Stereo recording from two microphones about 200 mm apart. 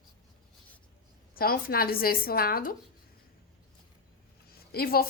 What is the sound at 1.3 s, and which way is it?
Speech, 50° left (ahead or behind).